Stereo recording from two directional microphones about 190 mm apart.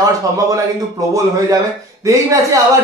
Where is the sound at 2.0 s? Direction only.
15° right (ahead or behind).